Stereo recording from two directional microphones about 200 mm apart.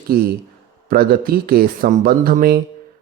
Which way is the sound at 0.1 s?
50° right (ahead or behind).